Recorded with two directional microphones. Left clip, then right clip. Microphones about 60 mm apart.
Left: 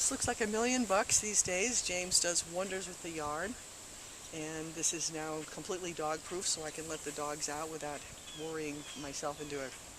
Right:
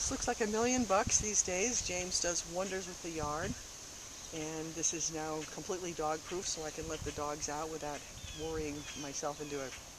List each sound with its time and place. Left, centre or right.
0.0 s speech: left
9.0 s speech: left